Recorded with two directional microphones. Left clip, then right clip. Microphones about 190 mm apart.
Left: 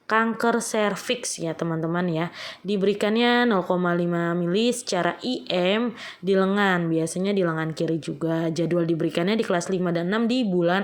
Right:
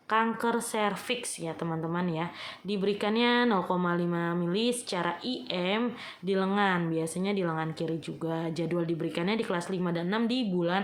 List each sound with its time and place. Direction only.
0.1 s speech: 30° left (ahead or behind)